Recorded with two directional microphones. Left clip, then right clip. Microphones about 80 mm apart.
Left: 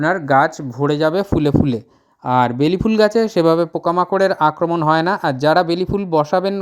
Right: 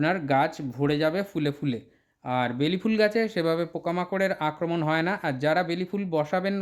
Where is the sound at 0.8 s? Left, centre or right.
Left.